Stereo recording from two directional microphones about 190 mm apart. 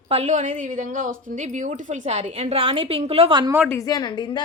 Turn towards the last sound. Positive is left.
turn(degrees=20)  # may be behind; listen again after turning